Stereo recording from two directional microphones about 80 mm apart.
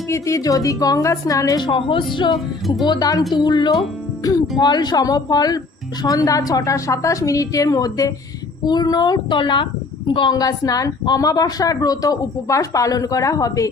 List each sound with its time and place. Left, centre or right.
0.1 s a man's voice: left
1.5 s speech: left
2.1 s speech: left
2.8 s a man's voice: left
3.3 s speech: left
4.2 s a man's voice: left
10.3 s a man's voice: left